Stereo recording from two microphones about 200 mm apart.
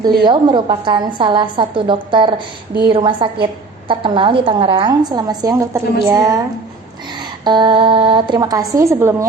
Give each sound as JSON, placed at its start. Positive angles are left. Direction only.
{"t": 0.0, "sound": "a woman's voice", "side_deg": -25}
{"t": 7.4, "sound": "a woman's voice", "side_deg": -20}